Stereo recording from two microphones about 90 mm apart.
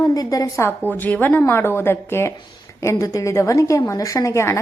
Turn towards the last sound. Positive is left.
turn(degrees=30)  # may be behind; listen again after turning